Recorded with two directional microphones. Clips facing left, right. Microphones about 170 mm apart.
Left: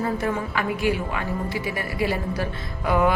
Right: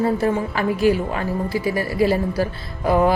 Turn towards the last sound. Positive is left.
turn(degrees=-35)  # may be behind; listen again after turning